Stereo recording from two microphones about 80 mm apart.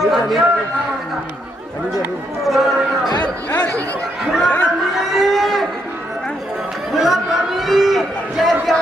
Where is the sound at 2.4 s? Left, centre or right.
Centre.